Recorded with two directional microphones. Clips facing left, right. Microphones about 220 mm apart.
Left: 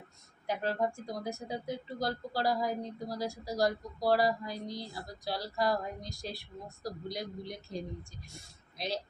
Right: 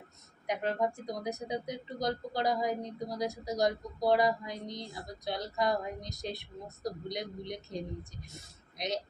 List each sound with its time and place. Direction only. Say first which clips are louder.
0.4 s speech: right 1 dB; 20° right (ahead or behind)